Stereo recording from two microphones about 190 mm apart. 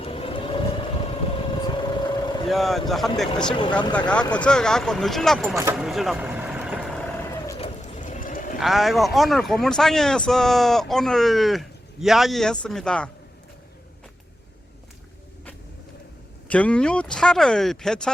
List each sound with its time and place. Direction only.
0.0 s vehicle: 30° left (ahead or behind)
2.5 s speech: centre (ahead or behind)
3.6 s speech: 25° left (ahead or behind)
3.9 s speech: 5° left (ahead or behind)
5.8 s vehicle: centre (ahead or behind)
7.6 s a sound: 35° left (ahead or behind)
8.5 s speech: centre (ahead or behind)
16.5 s speech: 5° left (ahead or behind)